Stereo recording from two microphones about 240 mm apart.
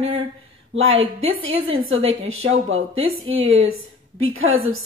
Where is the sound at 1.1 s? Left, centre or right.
Right.